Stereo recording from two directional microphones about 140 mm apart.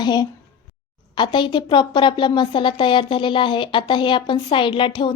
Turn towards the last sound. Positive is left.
turn(degrees=35)  # may be behind; listen again after turning